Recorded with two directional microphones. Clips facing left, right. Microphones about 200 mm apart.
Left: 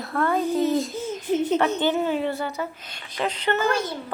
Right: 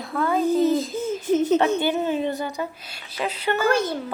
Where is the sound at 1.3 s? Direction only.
45° right (ahead or behind).